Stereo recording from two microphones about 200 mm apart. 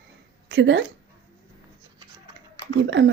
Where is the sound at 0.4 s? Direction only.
60° right (ahead or behind).